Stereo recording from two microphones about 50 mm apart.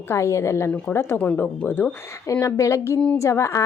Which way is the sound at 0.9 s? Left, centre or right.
Left.